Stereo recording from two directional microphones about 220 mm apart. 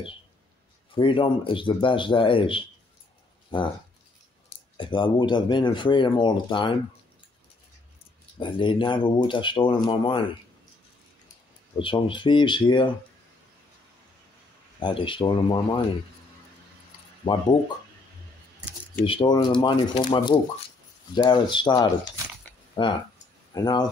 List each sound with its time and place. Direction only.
0.9 s speech: 25° left (ahead or behind)
4.7 s speech: 20° left (ahead or behind)
8.4 s speech: 20° left (ahead or behind)
11.8 s speech: 20° left (ahead or behind)
14.8 s speech: 20° left (ahead or behind)
17.2 s speech: 20° left (ahead or behind)
19.0 s speech: 20° left (ahead or behind)